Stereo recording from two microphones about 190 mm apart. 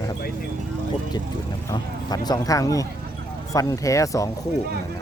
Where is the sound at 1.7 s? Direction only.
20° left (ahead or behind).